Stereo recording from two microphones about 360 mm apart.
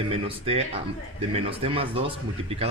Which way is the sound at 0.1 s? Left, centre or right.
Centre.